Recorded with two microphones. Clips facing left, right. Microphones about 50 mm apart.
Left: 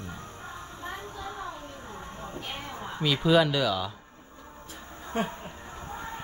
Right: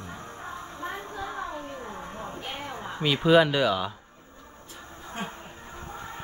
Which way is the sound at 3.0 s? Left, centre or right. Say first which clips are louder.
Right 3 dB; centre.